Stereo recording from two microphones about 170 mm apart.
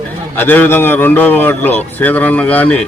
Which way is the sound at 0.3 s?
10° left (ahead or behind).